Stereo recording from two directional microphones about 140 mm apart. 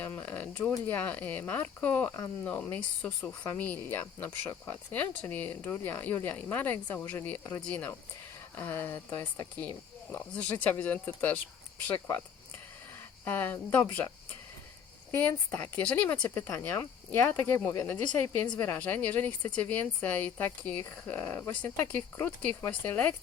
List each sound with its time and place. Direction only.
0.0 s a sound: 15° left (ahead or behind)
0.7 s speech: 10° left (ahead or behind)
13.2 s speech: 15° left (ahead or behind)
15.1 s speech: 15° left (ahead or behind)